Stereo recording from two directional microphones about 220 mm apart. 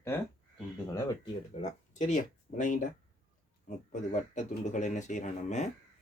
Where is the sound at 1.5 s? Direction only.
30° left (ahead or behind).